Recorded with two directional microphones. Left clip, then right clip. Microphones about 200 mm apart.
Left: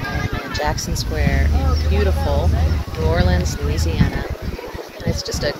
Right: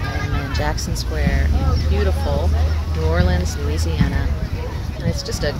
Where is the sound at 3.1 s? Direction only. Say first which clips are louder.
Left 2 dB; 5° left (ahead or behind).